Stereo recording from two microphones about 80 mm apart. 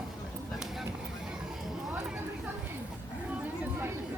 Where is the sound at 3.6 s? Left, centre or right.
Right.